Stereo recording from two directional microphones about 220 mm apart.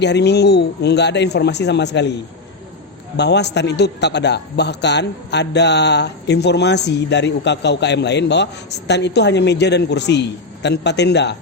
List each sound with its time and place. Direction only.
0.0 s a man's voice: 50° left (ahead or behind)
3.2 s a man's voice: 50° left (ahead or behind)